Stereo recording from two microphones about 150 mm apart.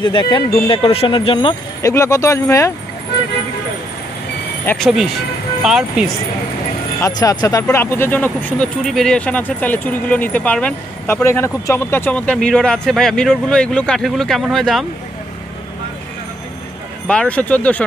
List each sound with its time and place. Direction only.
0.0 s speech: 30° left (ahead or behind)
1.8 s speech: 20° left (ahead or behind)
4.7 s speech: centre (ahead or behind)
7.0 s speech: 25° left (ahead or behind); by 14.9 s centre (ahead or behind)
17.1 s speech: 10° left (ahead or behind)